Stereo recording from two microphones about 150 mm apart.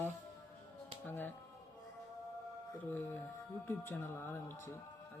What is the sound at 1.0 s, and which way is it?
Speech, 10° left (ahead or behind).